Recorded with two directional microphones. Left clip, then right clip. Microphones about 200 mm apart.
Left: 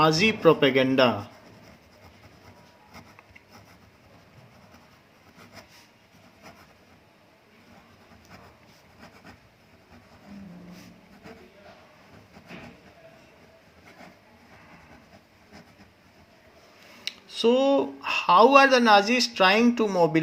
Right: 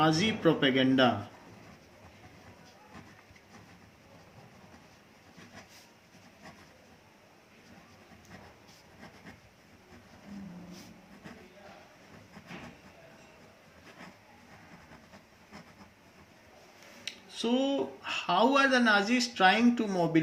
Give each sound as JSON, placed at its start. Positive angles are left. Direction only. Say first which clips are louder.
{"t": 0.0, "sound": "speech", "louder": "left 7 dB", "side_deg": 50}
{"t": 17.1, "sound": "a sound", "louder": "left 10 dB", "side_deg": 50}
{"t": 18.3, "sound": "speech", "louder": "left 9 dB", "side_deg": 50}